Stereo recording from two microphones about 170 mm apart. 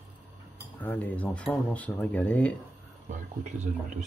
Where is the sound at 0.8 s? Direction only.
10° left (ahead or behind).